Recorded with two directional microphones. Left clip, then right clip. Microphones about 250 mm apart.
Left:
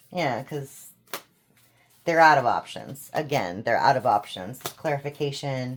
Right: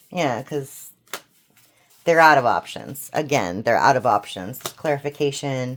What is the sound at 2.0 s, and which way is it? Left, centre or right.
Speech, right.